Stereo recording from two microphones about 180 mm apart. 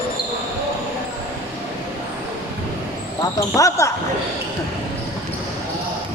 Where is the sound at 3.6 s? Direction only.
15° left (ahead or behind).